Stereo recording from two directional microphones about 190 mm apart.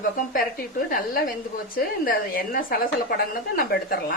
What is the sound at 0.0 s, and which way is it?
A woman's voice, 50° left (ahead or behind).